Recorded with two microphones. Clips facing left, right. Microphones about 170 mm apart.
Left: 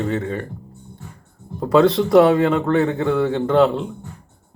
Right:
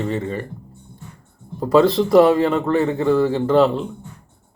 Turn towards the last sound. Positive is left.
turn(degrees=0)  # may be behind; listen again after turning